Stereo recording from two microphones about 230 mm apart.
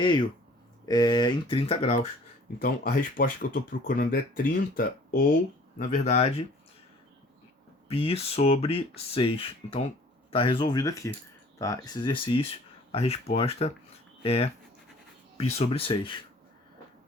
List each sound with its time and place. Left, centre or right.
0.0 s speech: centre; by 5.2 s left
5.9 s speech: left
7.9 s speech: left